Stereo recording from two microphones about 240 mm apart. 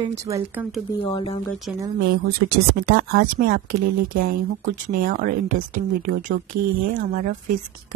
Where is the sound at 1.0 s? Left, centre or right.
Left.